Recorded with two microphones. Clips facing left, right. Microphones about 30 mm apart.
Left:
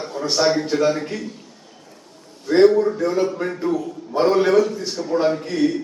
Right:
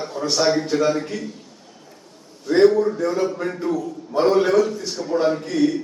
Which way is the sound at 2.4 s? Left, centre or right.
Centre.